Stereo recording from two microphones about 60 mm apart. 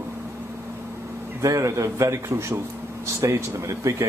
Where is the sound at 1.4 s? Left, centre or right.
Right.